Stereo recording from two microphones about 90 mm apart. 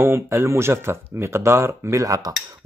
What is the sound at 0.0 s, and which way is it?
Speech, 30° right (ahead or behind).